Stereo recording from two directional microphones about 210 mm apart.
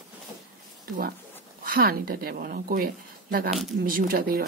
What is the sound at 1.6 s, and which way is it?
A woman's voice, 45° right (ahead or behind).